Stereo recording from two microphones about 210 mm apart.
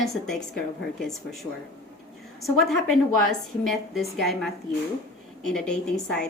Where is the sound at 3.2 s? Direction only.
Centre (ahead or behind).